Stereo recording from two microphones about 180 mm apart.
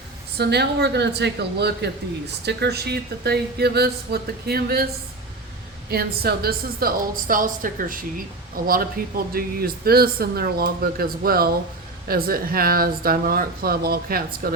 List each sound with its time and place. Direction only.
0.3 s speech: 65° right (ahead or behind)
5.9 s a woman's voice: 60° right (ahead or behind)